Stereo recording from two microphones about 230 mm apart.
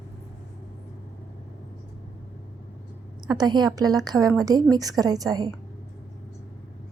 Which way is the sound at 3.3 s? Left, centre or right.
Centre.